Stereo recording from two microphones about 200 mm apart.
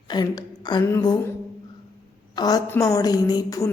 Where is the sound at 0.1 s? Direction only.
20° left (ahead or behind).